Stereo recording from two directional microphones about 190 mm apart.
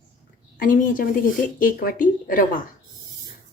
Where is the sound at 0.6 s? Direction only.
45° left (ahead or behind).